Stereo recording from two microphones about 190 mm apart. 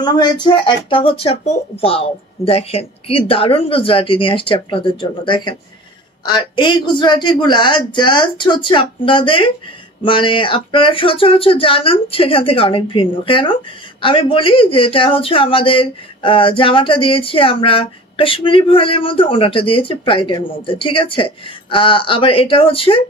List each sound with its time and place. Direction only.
0.0 s speech: 20° left (ahead or behind)